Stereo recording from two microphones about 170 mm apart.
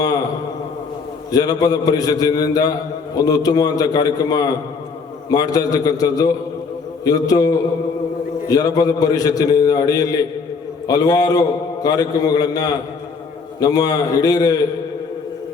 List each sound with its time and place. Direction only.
1.3 s a man's voice: 20° left (ahead or behind)